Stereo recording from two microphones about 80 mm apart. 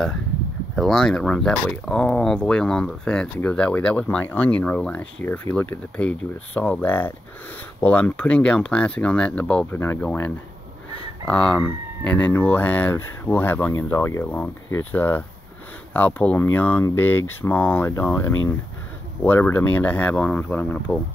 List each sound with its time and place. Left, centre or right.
0.7 s speech: centre
1.3 s speech: centre
9.7 s speech: left
13.9 s speech: left
14.2 s speech: centre
20.4 s speech: left
20.7 s speech: centre